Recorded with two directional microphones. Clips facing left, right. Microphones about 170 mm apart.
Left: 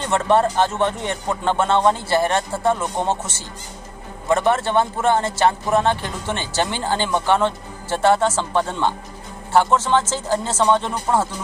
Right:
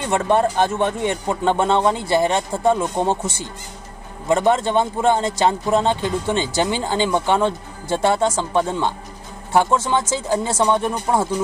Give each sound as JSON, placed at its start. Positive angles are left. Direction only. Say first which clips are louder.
{"t": 0.0, "sound": "speech", "louder": "even", "side_deg": -15}